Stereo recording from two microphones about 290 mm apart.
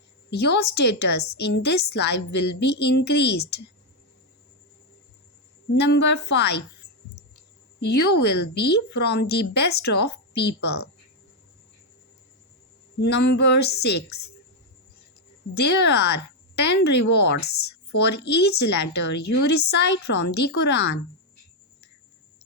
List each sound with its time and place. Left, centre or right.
0.3 s a woman's voice: left
5.7 s a woman's voice: left
7.8 s a woman's voice: left
13.0 s a woman's voice: left
15.5 s a woman's voice: left